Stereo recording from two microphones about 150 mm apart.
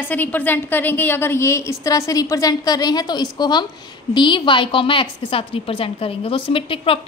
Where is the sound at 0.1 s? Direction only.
10° left (ahead or behind).